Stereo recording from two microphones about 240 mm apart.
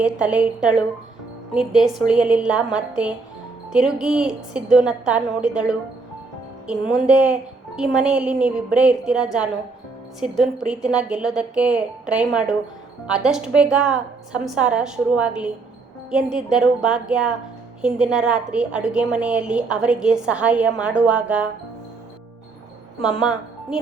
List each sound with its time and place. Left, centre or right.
0.0 s a woman's voice: centre